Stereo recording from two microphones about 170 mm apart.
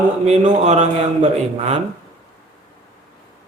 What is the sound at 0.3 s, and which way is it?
Mantra, 45° right (ahead or behind).